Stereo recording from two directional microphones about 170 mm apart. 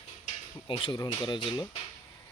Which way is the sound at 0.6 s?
30° left (ahead or behind).